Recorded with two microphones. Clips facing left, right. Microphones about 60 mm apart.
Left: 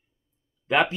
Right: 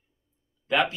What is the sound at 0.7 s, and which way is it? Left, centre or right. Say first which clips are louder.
Speech: left 2 dB; left.